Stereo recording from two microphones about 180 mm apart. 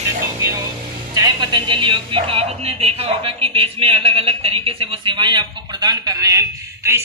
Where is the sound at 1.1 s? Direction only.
20° right (ahead or behind).